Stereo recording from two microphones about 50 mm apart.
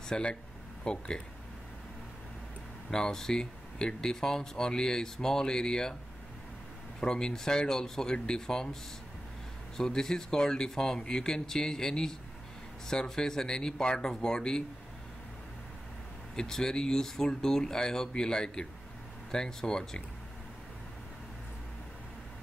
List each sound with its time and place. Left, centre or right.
0.1 s speech: centre
2.9 s speech: centre
7.0 s speech: centre
9.8 s speech: centre
16.3 s speech: centre